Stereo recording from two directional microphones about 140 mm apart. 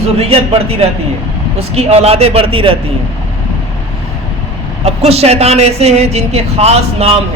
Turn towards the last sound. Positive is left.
turn(degrees=-45)  # may be behind; listen again after turning